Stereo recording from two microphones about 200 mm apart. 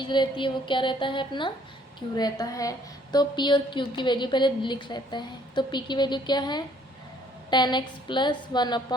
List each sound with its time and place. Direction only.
0.0 s a woman's voice: 25° left (ahead or behind)